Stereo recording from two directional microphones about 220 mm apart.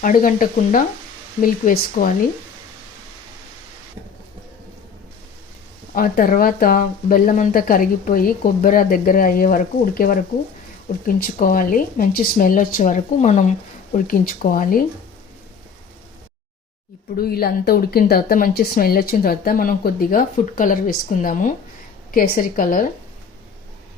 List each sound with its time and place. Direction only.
0.0 s speech: 40° left (ahead or behind)
5.9 s speech: 40° left (ahead or behind)
17.2 s speech: 45° left (ahead or behind)